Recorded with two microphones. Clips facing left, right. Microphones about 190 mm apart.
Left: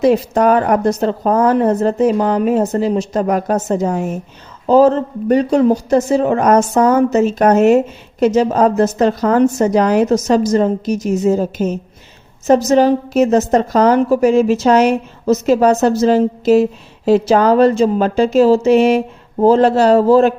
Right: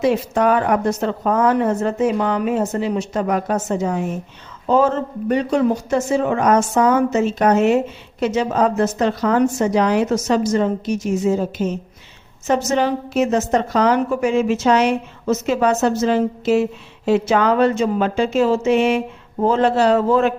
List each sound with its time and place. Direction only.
0.0 s a woman's voice: 40° left (ahead or behind)